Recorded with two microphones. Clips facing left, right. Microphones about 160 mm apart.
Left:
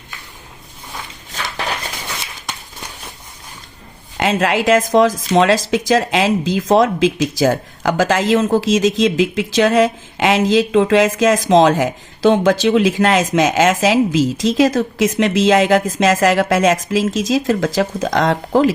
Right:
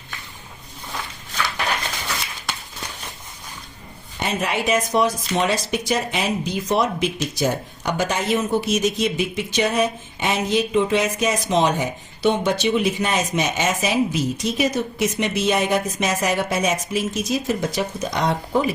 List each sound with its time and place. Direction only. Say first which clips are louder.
4.2 s speech: left 7 dB; 90° left